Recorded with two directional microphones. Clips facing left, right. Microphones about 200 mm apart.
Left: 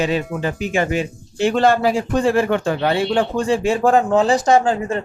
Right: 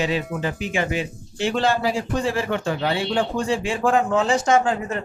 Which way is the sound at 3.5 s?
40° left (ahead or behind).